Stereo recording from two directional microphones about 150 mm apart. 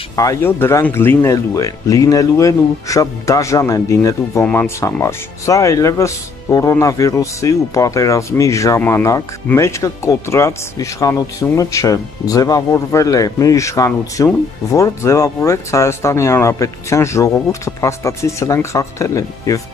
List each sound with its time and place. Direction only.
0.1 s speech: 20° left (ahead or behind)